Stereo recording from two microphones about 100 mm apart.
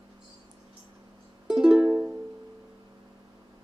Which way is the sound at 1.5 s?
5° right (ahead or behind).